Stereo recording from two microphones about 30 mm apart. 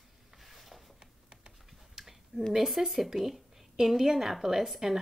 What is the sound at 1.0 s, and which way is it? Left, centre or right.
Typing, right.